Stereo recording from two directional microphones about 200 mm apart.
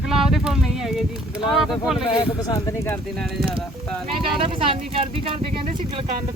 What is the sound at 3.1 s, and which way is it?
Speech, centre (ahead or behind).